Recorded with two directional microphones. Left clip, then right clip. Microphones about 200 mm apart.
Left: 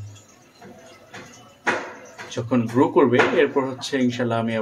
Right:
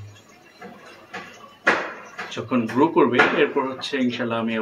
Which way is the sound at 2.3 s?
25° left (ahead or behind).